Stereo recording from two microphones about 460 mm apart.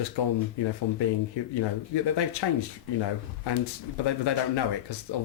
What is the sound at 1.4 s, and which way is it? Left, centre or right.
Speech, left.